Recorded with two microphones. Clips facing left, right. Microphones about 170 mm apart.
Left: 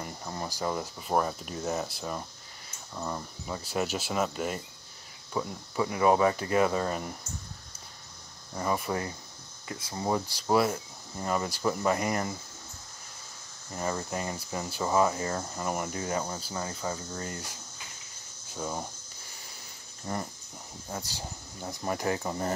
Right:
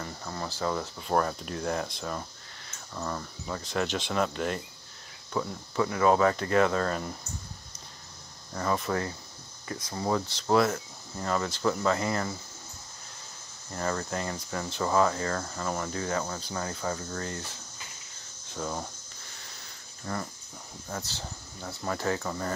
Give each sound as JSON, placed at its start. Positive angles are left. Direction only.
{"t": 0.0, "sound": "speech", "side_deg": 20}
{"t": 8.5, "sound": "speech", "side_deg": 10}
{"t": 13.7, "sound": "speech", "side_deg": 10}
{"t": 20.1, "sound": "speech", "side_deg": 20}